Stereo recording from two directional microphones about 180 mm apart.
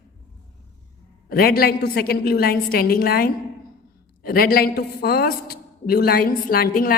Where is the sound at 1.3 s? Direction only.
55° left (ahead or behind).